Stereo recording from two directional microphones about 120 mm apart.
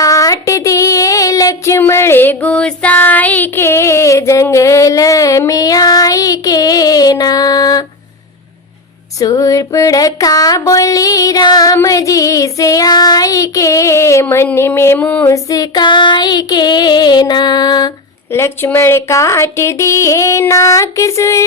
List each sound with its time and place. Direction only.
0.0 s child singing: 30° left (ahead or behind)
1.8 s female singing: 20° left (ahead or behind)
9.2 s female singing: 30° left (ahead or behind)
15.4 s child singing: 30° left (ahead or behind)
18.3 s female singing: 20° left (ahead or behind)